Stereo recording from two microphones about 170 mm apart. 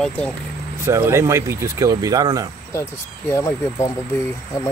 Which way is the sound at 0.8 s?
15° right (ahead or behind).